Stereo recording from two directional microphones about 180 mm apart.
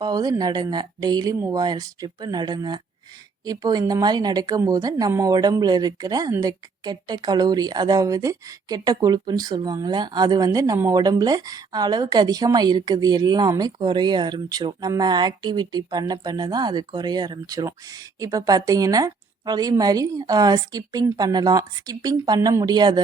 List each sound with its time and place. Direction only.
0.0 s a woman's voice: 20° right (ahead or behind)